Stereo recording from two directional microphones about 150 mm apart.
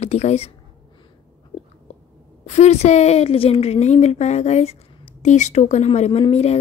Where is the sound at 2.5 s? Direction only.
50° left (ahead or behind).